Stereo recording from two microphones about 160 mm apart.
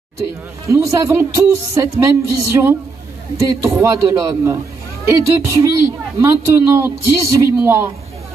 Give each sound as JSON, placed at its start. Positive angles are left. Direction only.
{"t": 0.7, "sound": "speech", "side_deg": -20}